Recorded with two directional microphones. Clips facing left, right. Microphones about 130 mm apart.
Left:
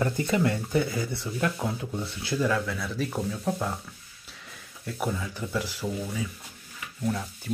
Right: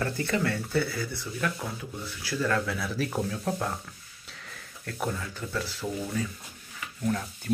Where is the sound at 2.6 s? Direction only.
Centre (ahead or behind).